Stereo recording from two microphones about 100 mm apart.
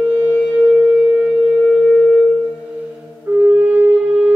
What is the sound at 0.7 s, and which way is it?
Shofar, 15° right (ahead or behind).